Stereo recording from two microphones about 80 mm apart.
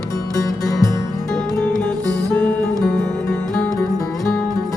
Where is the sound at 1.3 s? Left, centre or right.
Centre.